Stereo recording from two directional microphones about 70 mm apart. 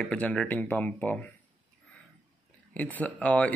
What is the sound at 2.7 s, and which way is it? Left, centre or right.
Speech, left.